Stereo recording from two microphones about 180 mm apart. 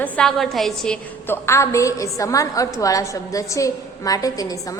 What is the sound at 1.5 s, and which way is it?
A woman's voice, 15° left (ahead or behind).